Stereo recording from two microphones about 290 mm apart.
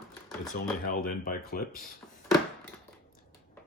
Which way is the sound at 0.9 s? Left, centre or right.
Left.